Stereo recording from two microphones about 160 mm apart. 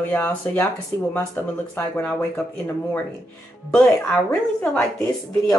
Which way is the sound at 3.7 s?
5° left (ahead or behind).